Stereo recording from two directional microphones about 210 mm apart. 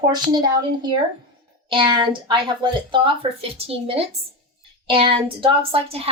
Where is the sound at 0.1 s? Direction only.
20° right (ahead or behind).